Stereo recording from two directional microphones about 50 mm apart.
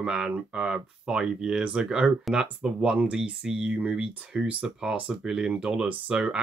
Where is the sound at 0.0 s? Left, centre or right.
Centre.